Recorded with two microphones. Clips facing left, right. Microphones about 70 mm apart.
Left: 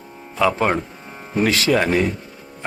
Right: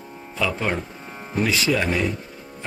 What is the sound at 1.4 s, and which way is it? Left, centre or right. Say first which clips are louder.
Speech: left 4 dB; left.